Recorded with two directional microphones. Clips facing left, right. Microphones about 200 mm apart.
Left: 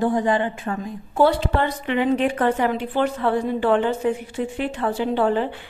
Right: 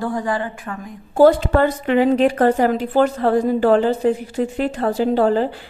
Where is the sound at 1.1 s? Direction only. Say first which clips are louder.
Right 6 dB; 45° right (ahead or behind).